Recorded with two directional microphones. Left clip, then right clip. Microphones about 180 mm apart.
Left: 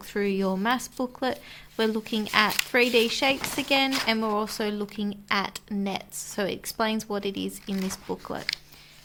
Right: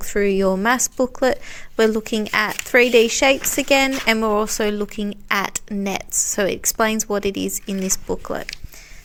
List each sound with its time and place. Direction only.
0.1 s a woman's voice: 35° right (ahead or behind)